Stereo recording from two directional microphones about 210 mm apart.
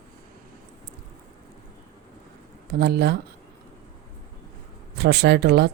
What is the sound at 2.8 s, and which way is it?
Speech, 50° right (ahead or behind).